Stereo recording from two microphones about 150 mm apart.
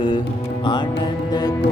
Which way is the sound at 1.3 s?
25° left (ahead or behind).